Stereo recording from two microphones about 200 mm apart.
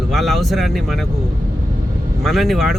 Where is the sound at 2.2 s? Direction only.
Centre (ahead or behind).